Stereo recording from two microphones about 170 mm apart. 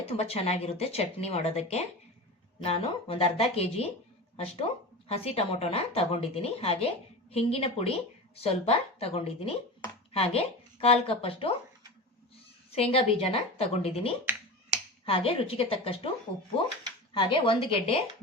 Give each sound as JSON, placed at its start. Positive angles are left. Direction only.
{"t": 0.2, "sound": "a woman's voice", "side_deg": 40}
{"t": 12.7, "sound": "a woman's voice", "side_deg": 35}
{"t": 17.2, "sound": "a woman's voice", "side_deg": 30}